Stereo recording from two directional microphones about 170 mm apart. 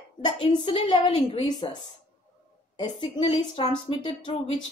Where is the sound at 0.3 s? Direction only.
30° left (ahead or behind).